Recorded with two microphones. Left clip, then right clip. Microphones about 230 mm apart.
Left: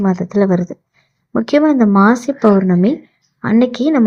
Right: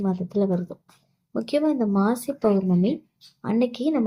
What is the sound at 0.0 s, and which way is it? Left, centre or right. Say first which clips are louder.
Speech: left 10 dB; left.